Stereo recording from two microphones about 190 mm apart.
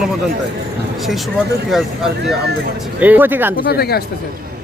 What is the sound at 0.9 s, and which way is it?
Speech, centre (ahead or behind).